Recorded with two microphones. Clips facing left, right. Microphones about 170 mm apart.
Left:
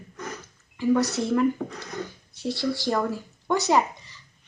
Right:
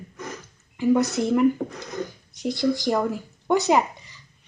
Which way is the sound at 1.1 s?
15° right (ahead or behind).